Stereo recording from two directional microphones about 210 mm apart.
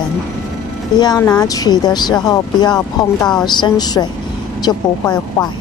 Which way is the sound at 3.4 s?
20° left (ahead or behind).